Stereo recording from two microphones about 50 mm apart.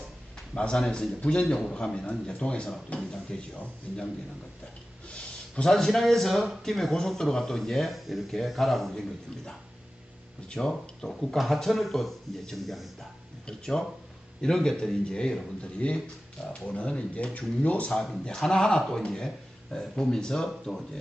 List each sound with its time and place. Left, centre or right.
0.5 s a man's voice: centre
5.0 s a sound: left
5.6 s speech: centre
6.7 s speech: centre
10.5 s a man's voice: centre
18.3 s speech: centre